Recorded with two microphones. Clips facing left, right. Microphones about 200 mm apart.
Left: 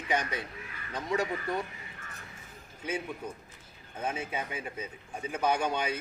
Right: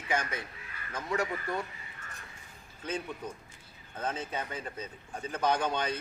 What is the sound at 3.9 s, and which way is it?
A man's voice, 10° left (ahead or behind).